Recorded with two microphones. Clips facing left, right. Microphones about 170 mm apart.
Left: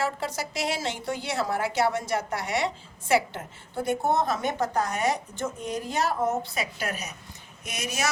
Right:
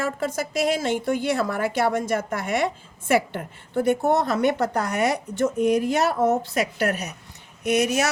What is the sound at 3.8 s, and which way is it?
A woman's voice, 70° right (ahead or behind).